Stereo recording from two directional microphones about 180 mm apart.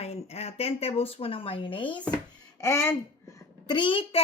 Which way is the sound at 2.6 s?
15° left (ahead or behind).